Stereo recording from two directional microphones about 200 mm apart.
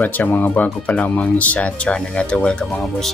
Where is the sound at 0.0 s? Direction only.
10° left (ahead or behind).